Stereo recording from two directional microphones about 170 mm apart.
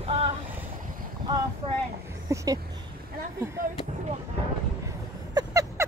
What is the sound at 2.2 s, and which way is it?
Speech, 20° right (ahead or behind).